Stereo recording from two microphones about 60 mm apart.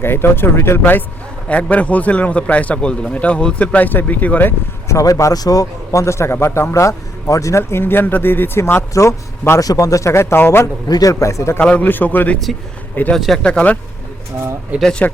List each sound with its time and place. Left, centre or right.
0.0 s speech: left
1.7 s a man's voice: left
4.9 s a man's voice: left
6.7 s speech: left
8.9 s a man's voice: left
9.6 s a man's voice: left
10.1 s speech: left
10.8 s a man's voice: left
11.6 s a man's voice: centre
11.9 s speech: left
13.1 s speech: centre
13.4 s a man's voice: left
14.7 s speech: right